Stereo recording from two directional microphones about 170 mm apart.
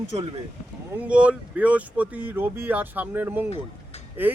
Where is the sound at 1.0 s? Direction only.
5° right (ahead or behind).